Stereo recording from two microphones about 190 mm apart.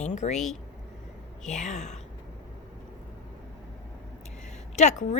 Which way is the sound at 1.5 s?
40° left (ahead or behind).